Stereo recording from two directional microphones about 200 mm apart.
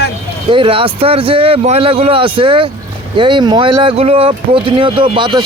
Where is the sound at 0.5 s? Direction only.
25° right (ahead or behind).